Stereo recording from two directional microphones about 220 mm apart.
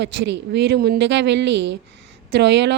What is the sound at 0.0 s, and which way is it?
Speech, 50° right (ahead or behind).